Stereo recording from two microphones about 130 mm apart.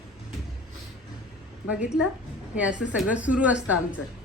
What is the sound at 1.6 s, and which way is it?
A woman's voice, 10° right (ahead or behind).